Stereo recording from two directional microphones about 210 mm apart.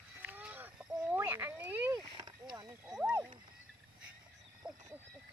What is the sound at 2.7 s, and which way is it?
Horse, 5° right (ahead or behind).